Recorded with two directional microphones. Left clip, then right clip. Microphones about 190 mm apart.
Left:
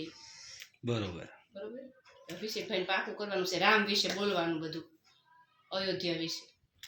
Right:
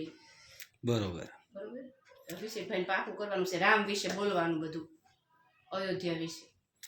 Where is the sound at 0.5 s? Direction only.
15° right (ahead or behind).